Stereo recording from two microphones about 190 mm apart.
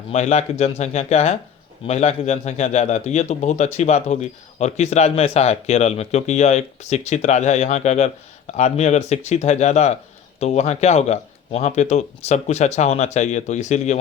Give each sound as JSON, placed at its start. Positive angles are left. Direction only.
{"t": 0.1, "sound": "a man's voice", "side_deg": 35}